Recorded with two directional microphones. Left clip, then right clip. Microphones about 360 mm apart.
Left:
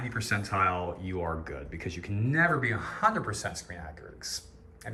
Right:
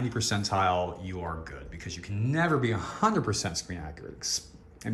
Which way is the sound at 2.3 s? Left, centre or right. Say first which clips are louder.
Left 1 dB; centre.